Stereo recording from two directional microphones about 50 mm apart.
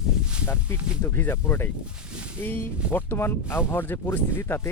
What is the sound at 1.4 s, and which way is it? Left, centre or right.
Speech, left.